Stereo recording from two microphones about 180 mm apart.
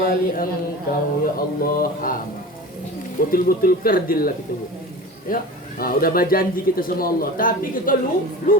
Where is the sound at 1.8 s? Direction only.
50° left (ahead or behind).